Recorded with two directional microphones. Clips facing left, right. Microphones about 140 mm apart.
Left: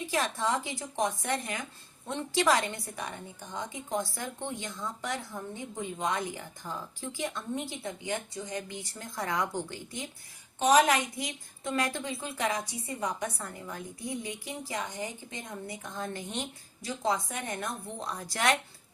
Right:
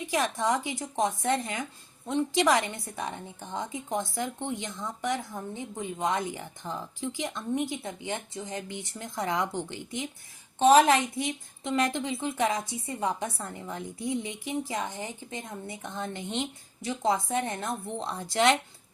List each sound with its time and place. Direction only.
0.1 s a woman's voice: 20° right (ahead or behind)